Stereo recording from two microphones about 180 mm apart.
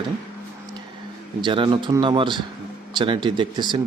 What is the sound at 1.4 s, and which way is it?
Speech, 25° right (ahead or behind).